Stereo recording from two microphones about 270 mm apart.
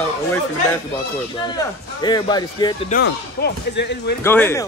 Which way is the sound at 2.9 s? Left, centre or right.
Left.